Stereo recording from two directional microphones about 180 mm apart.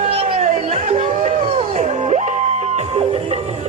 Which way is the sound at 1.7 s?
40° right (ahead or behind).